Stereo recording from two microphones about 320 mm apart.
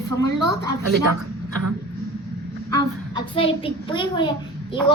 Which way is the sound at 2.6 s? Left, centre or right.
Centre.